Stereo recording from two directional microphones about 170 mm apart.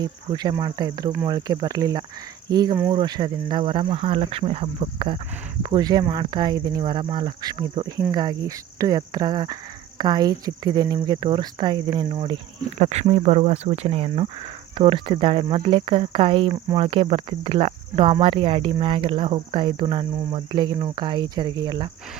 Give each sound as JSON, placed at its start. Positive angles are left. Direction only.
{"t": 0.0, "sound": "speech", "side_deg": -25}
{"t": 2.9, "sound": "cricket", "side_deg": -25}
{"t": 5.6, "sound": "speech", "side_deg": -25}
{"t": 12.8, "sound": "cricket", "side_deg": -40}